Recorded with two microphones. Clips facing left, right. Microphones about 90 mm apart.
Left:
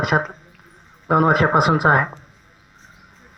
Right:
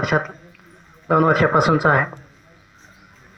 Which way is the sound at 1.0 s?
15° left (ahead or behind).